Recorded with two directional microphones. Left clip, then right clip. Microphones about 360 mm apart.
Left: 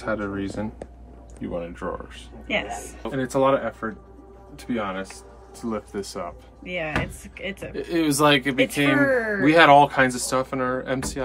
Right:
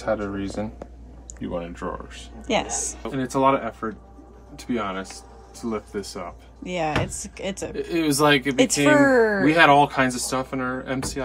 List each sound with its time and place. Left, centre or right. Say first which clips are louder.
0.0 s speech: right 2 dB; centre
2.4 s a woman's voice: right 2 dB; right
2.8 s speech: even; centre
6.8 s speech: right 3 dB; centre